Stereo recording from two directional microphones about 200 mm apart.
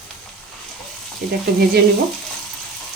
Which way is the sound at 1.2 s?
55° right (ahead or behind).